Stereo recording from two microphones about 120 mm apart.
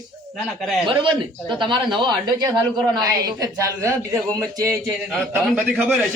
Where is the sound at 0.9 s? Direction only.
40° right (ahead or behind).